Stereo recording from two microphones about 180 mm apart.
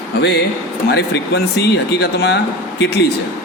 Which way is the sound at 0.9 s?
65° left (ahead or behind).